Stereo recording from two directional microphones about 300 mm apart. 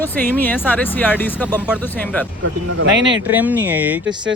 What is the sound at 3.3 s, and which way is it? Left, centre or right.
Speech, centre.